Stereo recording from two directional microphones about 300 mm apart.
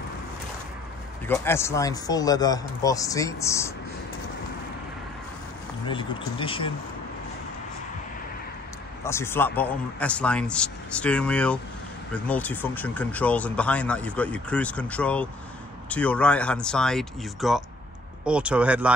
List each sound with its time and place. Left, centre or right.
1.2 s speech: centre
5.9 s speech: centre
9.0 s speech: centre